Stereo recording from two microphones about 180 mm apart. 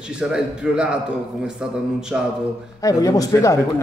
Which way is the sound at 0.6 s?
5° right (ahead or behind).